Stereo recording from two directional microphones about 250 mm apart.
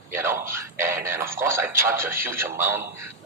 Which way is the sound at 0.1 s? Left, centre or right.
Centre.